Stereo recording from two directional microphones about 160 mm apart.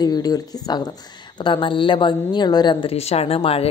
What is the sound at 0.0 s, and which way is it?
Speech, 25° left (ahead or behind).